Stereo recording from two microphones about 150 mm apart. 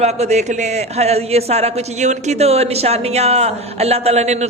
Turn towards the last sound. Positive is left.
turn(degrees=-45)  # may be behind; listen again after turning